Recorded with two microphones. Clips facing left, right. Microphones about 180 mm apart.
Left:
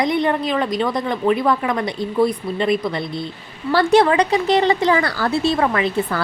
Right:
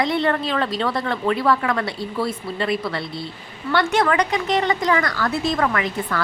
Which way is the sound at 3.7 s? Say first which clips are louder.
Left 5 dB; 35° left (ahead or behind).